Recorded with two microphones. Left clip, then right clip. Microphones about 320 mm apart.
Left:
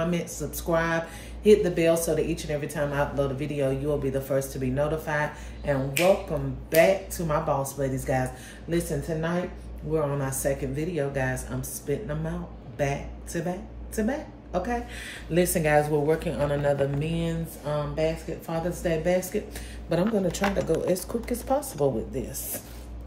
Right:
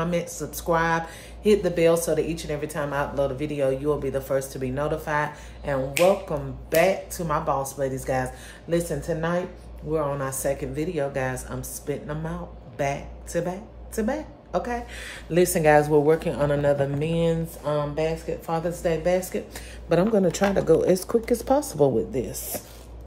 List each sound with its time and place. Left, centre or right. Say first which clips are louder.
0.0 s speech: right 2 dB; centre